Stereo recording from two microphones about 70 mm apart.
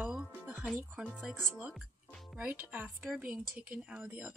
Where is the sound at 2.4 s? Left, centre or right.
Right.